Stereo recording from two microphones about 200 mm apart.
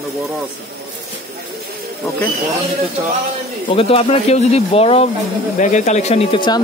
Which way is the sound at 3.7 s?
30° left (ahead or behind).